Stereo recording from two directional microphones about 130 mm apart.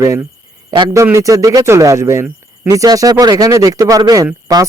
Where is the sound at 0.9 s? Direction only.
20° right (ahead or behind).